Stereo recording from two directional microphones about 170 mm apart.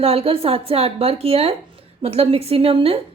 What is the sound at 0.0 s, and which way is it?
A woman's voice, 35° right (ahead or behind).